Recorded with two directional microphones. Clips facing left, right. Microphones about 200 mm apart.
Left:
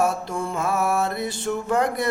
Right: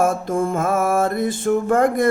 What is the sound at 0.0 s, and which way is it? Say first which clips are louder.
Music: right 5 dB; 50° right (ahead or behind).